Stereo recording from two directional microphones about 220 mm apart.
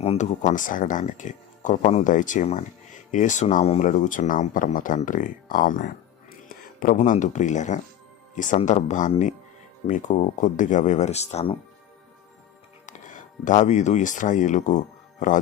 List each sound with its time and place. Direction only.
0.0 s speech: 30° left (ahead or behind)
12.8 s speech: 35° left (ahead or behind)